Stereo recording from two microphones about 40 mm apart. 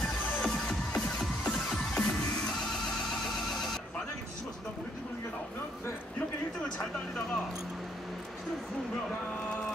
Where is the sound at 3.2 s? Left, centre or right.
Centre.